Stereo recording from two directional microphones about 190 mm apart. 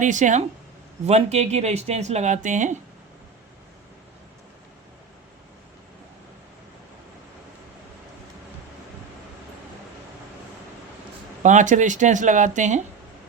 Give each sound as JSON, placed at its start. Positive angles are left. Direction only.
{"t": 0.0, "sound": "speech", "side_deg": -40}
{"t": 11.4, "sound": "speech", "side_deg": -40}